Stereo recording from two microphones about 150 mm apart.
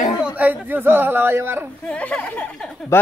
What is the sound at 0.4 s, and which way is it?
Speech, 10° right (ahead or behind).